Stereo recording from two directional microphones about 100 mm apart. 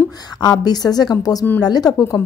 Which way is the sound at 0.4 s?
40° left (ahead or behind).